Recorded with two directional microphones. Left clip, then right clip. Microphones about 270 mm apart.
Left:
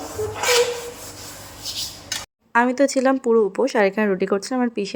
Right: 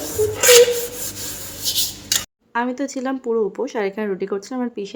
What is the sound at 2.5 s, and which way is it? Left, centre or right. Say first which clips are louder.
Speech: left 6 dB; centre.